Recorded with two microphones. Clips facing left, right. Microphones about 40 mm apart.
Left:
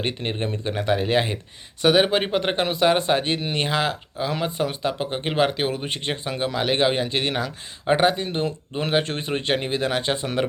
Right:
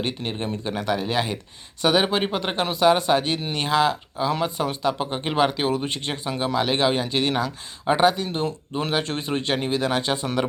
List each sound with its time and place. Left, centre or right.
0.2 s speech: left
1.8 s speech: left